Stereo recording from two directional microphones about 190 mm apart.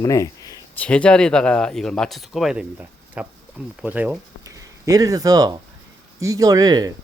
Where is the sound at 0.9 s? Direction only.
5° left (ahead or behind); by 6.9 s 20° right (ahead or behind).